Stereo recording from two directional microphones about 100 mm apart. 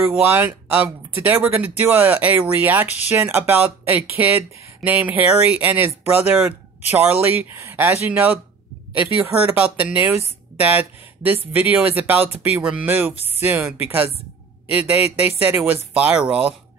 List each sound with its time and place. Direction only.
0.1 s speech: 20° right (ahead or behind)